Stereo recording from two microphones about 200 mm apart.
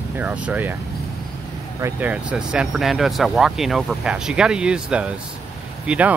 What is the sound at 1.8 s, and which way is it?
Speech, 5° right (ahead or behind).